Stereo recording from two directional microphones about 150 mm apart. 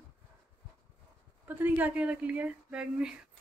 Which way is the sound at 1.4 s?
10° right (ahead or behind).